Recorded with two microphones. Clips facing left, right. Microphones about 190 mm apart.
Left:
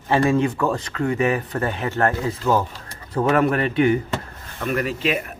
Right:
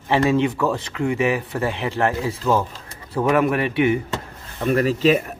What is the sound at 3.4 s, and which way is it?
Speech, 5° right (ahead or behind).